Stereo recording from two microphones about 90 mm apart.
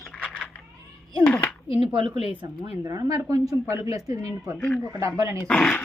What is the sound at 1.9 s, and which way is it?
Speech, 65° right (ahead or behind).